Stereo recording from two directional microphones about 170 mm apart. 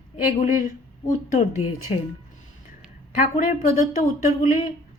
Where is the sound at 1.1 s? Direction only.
45° left (ahead or behind).